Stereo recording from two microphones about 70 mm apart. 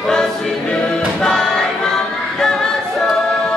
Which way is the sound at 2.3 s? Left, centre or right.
Centre.